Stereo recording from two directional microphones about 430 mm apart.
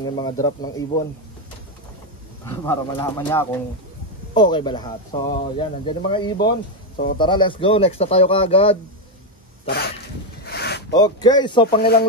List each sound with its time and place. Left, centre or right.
0.0 s speech: centre
2.4 s speech: centre; by 9.9 s left
10.4 s a sound: left
10.9 s speech: centre
11.6 s speech: left